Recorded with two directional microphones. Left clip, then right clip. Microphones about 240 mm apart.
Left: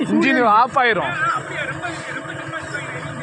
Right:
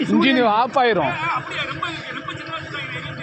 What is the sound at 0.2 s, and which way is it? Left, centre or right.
Speech, centre.